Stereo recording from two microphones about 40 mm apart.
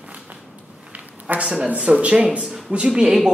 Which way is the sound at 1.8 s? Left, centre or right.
Right.